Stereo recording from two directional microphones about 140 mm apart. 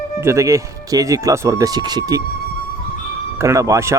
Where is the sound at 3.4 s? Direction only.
20° right (ahead or behind).